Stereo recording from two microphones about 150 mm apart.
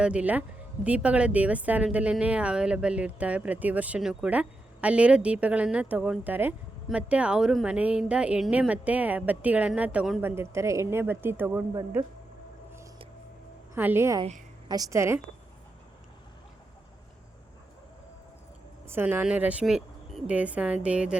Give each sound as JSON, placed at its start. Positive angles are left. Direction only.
{"t": 0.0, "sound": "a woman's voice", "side_deg": -10}
{"t": 13.7, "sound": "a woman's voice", "side_deg": -15}
{"t": 18.9, "sound": "a woman's voice", "side_deg": -15}